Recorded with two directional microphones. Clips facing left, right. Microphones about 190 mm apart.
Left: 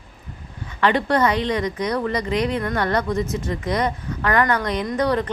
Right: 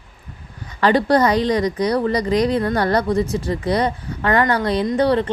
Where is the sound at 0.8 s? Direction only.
35° right (ahead or behind).